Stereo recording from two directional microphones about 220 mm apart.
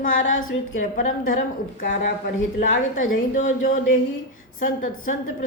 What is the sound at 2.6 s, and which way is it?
A woman's voice, 35° left (ahead or behind).